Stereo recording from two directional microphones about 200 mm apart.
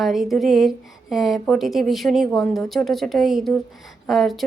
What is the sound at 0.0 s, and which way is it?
Speech, centre (ahead or behind).